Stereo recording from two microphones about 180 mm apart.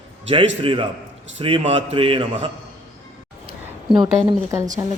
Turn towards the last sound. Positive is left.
turn(degrees=-20)  # may be behind; listen again after turning